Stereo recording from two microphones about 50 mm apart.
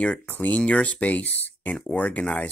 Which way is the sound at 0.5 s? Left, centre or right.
Left.